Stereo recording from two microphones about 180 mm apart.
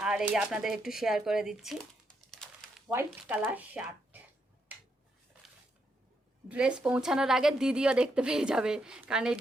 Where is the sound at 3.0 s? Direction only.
10° right (ahead or behind).